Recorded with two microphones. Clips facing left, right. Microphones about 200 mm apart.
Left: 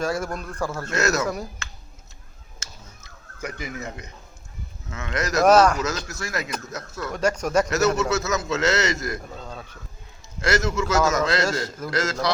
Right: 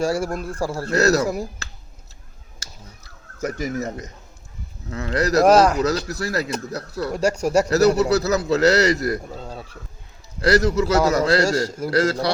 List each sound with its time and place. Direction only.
0.0 s a man's voice: 30° right (ahead or behind)
2.6 s a sound: 40° right (ahead or behind)
4.9 s a man's voice: 35° right (ahead or behind)